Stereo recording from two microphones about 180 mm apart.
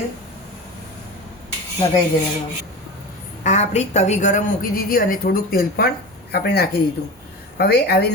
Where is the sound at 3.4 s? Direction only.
40° left (ahead or behind); by 8.1 s 65° left (ahead or behind).